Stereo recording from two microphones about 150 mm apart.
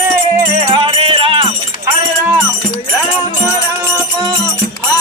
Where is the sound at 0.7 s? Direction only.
35° right (ahead or behind).